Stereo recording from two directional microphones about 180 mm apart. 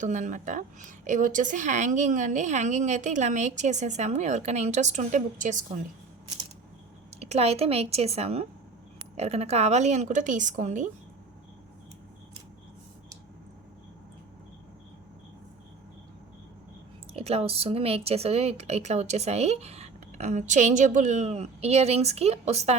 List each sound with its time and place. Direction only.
0.0 s a woman's voice: 45° right (ahead or behind)
7.2 s a woman's voice: 35° right (ahead or behind)
17.2 s a woman's voice: 35° right (ahead or behind)